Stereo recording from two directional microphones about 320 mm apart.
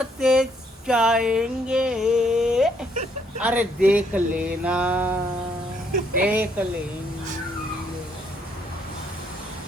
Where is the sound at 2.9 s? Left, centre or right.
Right.